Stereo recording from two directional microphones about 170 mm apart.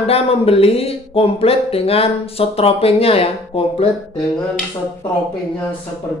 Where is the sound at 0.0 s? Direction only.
35° left (ahead or behind).